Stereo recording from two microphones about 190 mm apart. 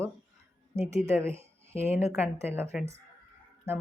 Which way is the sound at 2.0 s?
10° right (ahead or behind).